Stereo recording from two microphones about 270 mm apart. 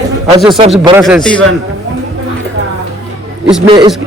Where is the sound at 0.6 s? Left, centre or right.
Right.